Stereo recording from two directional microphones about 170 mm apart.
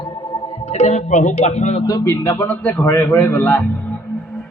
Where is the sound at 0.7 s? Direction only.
40° left (ahead or behind).